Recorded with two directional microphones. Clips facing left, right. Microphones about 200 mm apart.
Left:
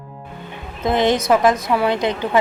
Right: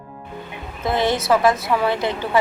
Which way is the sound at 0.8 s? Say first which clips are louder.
Left 3 dB; 20° left (ahead or behind).